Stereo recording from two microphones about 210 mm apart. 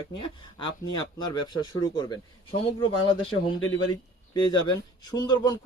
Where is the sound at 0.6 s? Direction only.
20° left (ahead or behind).